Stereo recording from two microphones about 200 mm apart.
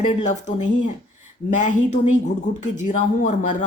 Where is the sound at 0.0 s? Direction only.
35° left (ahead or behind).